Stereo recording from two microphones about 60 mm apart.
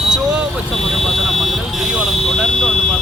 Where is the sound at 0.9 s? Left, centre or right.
Centre.